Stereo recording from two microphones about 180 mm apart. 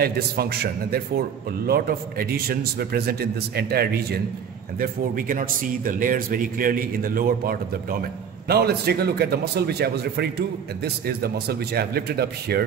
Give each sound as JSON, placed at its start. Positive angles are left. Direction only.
{"t": 0.0, "sound": "a man's voice", "side_deg": -60}
{"t": 4.7, "sound": "a man's voice", "side_deg": -50}